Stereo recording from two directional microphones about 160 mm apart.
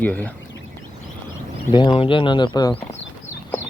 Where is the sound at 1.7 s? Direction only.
30° left (ahead or behind).